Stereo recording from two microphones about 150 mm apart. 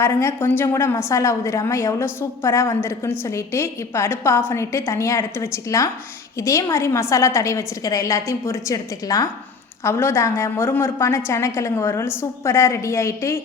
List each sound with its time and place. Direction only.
0.0 s a woman's voice: 20° left (ahead or behind)